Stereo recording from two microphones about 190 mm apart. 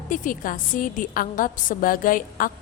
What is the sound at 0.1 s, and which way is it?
A woman's voice, 45° left (ahead or behind).